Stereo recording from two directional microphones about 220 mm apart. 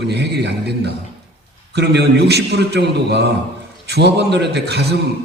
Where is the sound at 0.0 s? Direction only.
50° right (ahead or behind).